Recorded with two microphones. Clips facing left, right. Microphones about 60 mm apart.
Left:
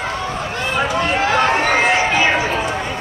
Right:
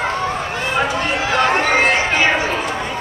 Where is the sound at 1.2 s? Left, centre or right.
Left.